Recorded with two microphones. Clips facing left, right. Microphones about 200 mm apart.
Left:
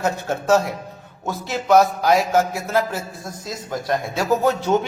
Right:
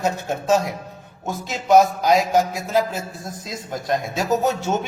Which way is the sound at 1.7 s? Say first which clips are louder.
Even; 20° right (ahead or behind).